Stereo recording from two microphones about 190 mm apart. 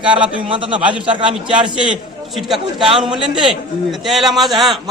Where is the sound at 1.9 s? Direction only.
Centre (ahead or behind).